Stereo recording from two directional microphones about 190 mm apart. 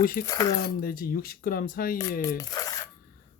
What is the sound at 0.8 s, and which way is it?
Speech, 50° left (ahead or behind).